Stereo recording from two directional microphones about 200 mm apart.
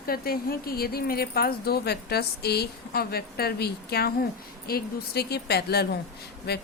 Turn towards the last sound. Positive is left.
turn(degrees=55)  # may be behind; listen again after turning